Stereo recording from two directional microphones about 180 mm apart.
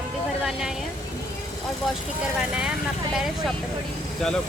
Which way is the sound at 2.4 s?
5° right (ahead or behind).